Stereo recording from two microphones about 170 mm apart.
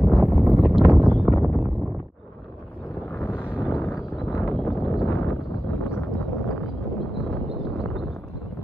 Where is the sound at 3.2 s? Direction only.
10° left (ahead or behind).